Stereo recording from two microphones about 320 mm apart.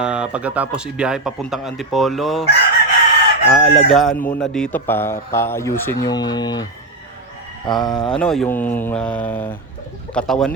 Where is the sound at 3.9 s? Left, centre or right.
Centre.